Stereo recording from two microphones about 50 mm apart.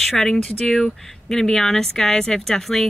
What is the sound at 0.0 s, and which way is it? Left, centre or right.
Speech, centre.